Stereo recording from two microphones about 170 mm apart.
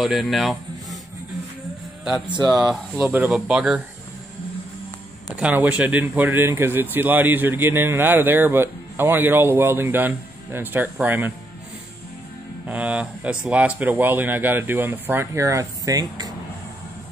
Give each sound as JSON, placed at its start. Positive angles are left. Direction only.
{"t": 0.0, "sound": "speech", "side_deg": 0}
{"t": 2.0, "sound": "speech", "side_deg": -5}
{"t": 2.3, "sound": "speech", "side_deg": -25}
{"t": 3.0, "sound": "speech", "side_deg": -10}
{"t": 5.4, "sound": "speech", "side_deg": -10}
{"t": 12.6, "sound": "speech", "side_deg": -10}